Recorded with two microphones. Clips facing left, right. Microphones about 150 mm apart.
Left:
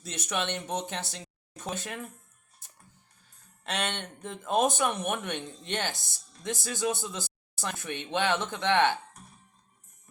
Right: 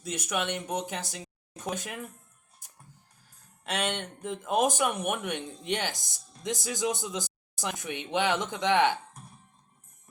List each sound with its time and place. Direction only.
0.0 s speech: 10° right (ahead or behind)
3.6 s speech: 10° right (ahead or behind)